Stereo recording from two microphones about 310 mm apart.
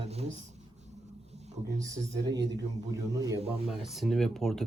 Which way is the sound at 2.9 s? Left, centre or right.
Centre.